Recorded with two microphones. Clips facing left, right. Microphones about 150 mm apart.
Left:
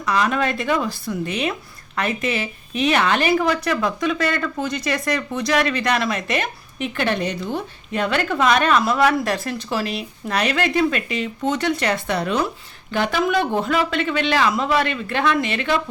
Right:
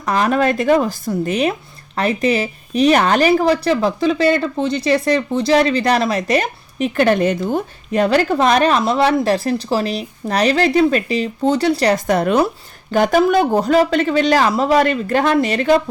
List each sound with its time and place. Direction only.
0.0 s speech: 45° right (ahead or behind)